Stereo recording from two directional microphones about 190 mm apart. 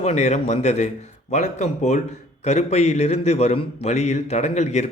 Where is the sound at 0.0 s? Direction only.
35° left (ahead or behind).